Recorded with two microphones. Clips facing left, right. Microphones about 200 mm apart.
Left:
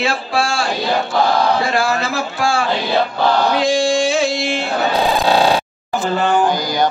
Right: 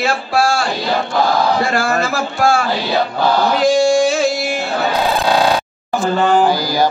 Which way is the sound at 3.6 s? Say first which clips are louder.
Right 3 dB; 45° right (ahead or behind).